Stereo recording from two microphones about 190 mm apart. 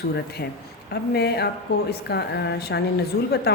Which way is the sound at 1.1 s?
60° left (ahead or behind).